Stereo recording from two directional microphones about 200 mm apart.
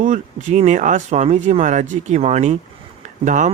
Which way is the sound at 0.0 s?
35° right (ahead or behind).